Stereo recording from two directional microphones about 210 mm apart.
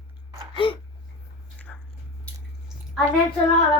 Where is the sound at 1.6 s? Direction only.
5° left (ahead or behind).